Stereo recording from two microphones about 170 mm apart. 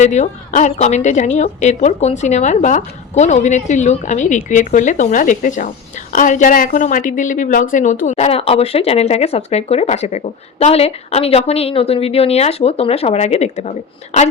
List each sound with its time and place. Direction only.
0.0 s speech: 45° left (ahead or behind)